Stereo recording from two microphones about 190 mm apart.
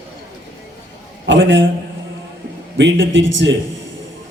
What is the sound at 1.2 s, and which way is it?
Speech, 75° right (ahead or behind).